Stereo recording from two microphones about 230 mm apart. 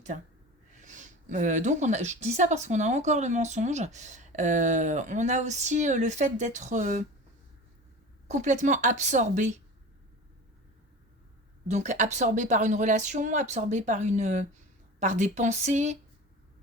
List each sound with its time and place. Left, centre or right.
0.8 s a woman's voice: right
8.3 s a woman's voice: right
11.7 s a woman's voice: right